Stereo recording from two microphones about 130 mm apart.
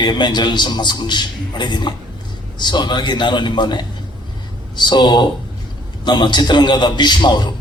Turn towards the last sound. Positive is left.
turn(degrees=35)  # may be behind; listen again after turning